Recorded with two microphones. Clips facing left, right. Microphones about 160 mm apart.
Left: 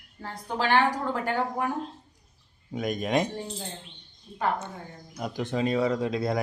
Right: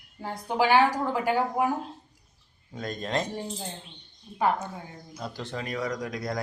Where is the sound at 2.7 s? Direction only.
15° left (ahead or behind).